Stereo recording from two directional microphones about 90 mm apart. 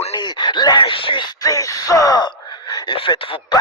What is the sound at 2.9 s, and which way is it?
Speech, 75° left (ahead or behind).